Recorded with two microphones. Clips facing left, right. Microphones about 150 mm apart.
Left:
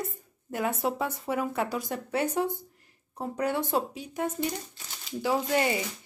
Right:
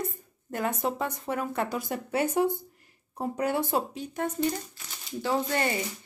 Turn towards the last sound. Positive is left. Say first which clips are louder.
# left 1 dB
turn(degrees=10)  # may be behind; listen again after turning